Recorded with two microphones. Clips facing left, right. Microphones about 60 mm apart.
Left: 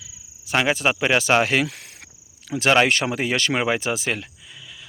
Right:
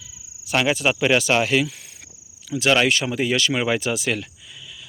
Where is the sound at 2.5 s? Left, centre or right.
Left.